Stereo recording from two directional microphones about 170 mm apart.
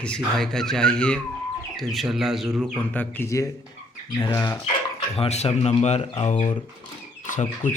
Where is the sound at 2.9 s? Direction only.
10° left (ahead or behind).